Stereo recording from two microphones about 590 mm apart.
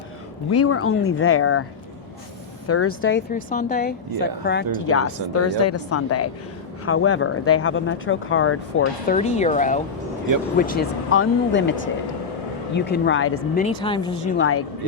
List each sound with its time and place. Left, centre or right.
0.5 s speech: left
2.6 s speech: left
12.7 s speech: centre
13.7 s speech: centre
14.3 s speech: left